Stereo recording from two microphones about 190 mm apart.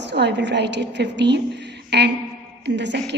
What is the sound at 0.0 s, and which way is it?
A woman's voice, 65° right (ahead or behind).